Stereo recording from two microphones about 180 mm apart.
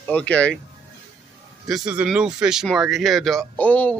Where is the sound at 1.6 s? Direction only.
5° right (ahead or behind).